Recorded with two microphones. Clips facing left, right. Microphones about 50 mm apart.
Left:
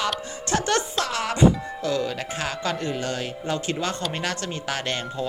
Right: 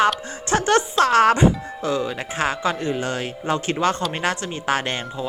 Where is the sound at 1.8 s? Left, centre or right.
Centre.